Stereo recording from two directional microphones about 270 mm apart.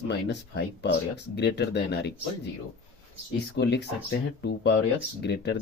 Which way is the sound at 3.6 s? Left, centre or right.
Left.